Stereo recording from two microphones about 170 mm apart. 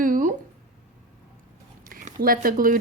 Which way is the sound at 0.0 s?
50° right (ahead or behind).